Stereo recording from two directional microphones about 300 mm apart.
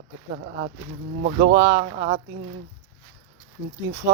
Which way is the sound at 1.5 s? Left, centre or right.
Centre.